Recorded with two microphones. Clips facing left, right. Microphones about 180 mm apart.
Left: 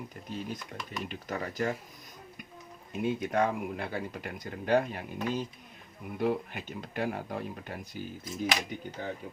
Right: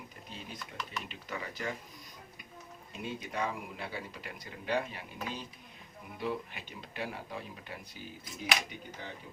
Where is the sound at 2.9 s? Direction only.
55° left (ahead or behind).